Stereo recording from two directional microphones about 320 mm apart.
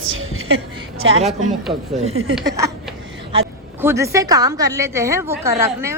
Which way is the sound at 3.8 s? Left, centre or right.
Centre.